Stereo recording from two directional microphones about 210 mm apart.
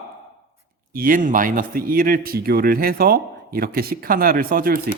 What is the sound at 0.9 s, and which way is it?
A man's voice, 40° right (ahead or behind).